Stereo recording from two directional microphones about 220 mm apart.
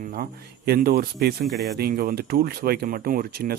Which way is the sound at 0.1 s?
45° right (ahead or behind).